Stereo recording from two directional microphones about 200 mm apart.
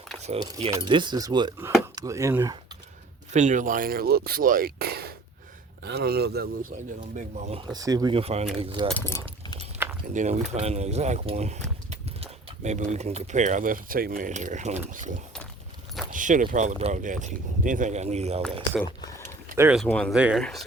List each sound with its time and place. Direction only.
0.8 s speech: 25° right (ahead or behind)
3.3 s speech: 35° right (ahead or behind)
7.2 s speech: 35° right (ahead or behind)
7.7 s speech: 20° right (ahead or behind)
9.0 s speech: 10° left (ahead or behind)
10.1 s speech: 35° right (ahead or behind)
16.1 s speech: 40° right (ahead or behind)
19.5 s speech: 10° right (ahead or behind)
19.8 s speech: 5° left (ahead or behind)